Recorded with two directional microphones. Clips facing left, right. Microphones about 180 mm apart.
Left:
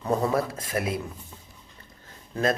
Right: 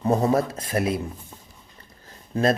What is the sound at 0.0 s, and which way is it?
Speech, 30° right (ahead or behind).